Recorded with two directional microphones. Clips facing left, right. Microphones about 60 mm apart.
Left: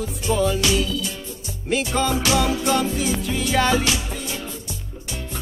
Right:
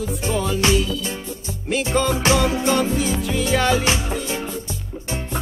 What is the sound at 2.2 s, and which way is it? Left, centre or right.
Music, right.